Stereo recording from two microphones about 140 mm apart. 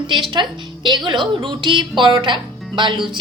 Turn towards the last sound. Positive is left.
turn(degrees=-35)  # may be behind; listen again after turning